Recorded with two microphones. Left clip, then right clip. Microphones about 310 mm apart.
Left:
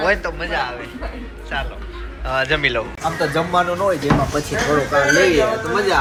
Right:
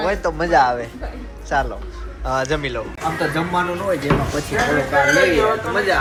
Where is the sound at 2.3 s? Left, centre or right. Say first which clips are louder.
Left 3 dB; centre.